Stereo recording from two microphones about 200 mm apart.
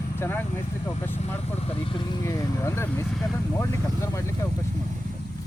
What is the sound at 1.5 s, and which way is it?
Speech, 30° left (ahead or behind).